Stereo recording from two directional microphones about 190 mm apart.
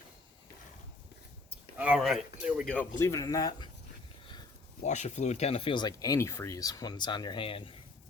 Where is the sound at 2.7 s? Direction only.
10° left (ahead or behind).